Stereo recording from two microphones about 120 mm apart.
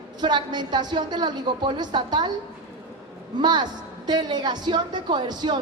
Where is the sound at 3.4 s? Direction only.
35° right (ahead or behind).